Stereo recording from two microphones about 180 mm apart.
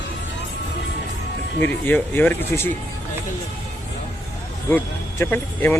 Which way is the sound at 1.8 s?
10° left (ahead or behind).